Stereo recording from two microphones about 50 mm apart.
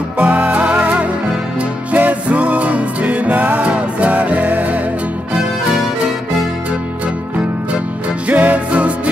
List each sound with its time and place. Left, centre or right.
0.2 s music: right
8.3 s music: right